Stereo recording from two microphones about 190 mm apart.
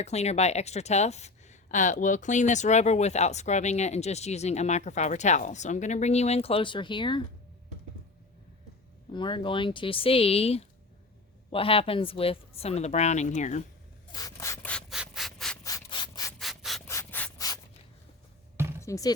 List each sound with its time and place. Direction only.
0.0 s a woman's voice: 35° left (ahead or behind)
9.1 s a woman's voice: 25° left (ahead or behind)
14.1 s rub: 20° left (ahead or behind); by 15.5 s centre (ahead or behind)
15.6 s rub: 20° left (ahead or behind)
16.4 s rub: centre (ahead or behind)
16.8 s rub: 15° left (ahead or behind)
18.8 s speech: 15° left (ahead or behind)